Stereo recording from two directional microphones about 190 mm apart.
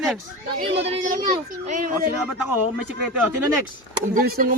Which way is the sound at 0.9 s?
45° right (ahead or behind).